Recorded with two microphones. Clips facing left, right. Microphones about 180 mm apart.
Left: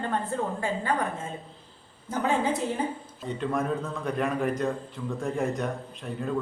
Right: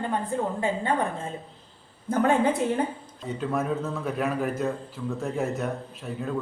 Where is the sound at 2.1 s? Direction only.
55° right (ahead or behind).